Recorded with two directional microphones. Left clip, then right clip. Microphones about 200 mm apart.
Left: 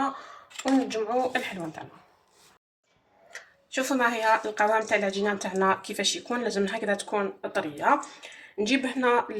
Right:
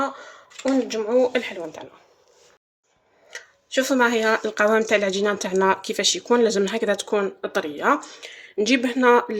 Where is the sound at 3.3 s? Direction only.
50° right (ahead or behind).